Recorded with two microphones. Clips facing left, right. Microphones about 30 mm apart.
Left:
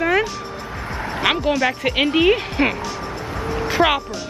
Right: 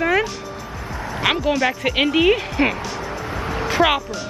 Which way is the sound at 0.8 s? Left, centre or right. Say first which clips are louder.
Left 2 dB; left.